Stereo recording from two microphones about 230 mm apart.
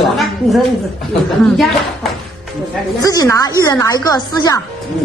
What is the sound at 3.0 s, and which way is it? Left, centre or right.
Speech, centre.